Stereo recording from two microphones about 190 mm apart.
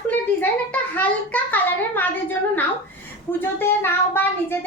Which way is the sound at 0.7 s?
10° left (ahead or behind).